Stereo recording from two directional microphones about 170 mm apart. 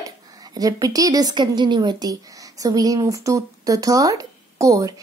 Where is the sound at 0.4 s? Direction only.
20° right (ahead or behind).